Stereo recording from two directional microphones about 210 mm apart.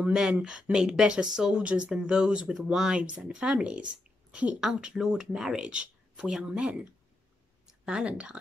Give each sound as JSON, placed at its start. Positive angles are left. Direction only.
{"t": 0.0, "sound": "speech", "side_deg": -5}